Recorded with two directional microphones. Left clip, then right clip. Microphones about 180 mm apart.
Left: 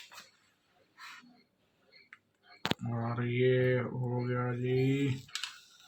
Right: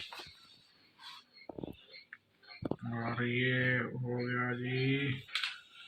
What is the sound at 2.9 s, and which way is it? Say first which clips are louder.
Mantra: right 1 dB; 55° left (ahead or behind).